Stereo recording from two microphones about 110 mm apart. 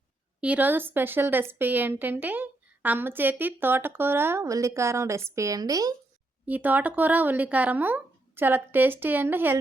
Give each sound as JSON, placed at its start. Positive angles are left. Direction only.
{"t": 0.4, "sound": "speech", "side_deg": -15}
{"t": 6.4, "sound": "speech", "side_deg": -15}